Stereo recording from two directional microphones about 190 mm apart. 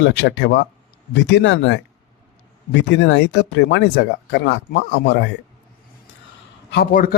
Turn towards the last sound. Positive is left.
turn(degrees=50)  # may be behind; listen again after turning